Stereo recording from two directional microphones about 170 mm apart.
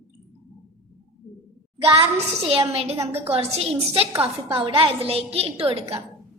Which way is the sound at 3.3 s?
35° right (ahead or behind).